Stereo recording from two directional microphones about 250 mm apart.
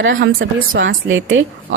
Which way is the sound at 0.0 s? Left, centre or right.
Right.